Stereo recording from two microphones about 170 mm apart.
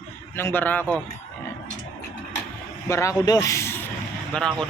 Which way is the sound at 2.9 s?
20° left (ahead or behind).